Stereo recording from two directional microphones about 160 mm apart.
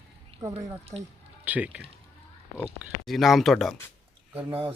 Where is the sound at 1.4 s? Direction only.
10° right (ahead or behind).